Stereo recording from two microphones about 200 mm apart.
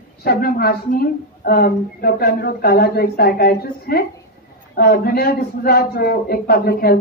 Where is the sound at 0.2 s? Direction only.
50° left (ahead or behind).